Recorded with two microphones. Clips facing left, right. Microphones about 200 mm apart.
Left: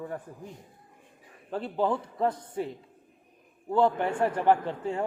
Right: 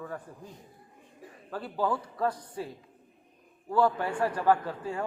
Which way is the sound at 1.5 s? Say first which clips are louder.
Left 3 dB; 25° left (ahead or behind).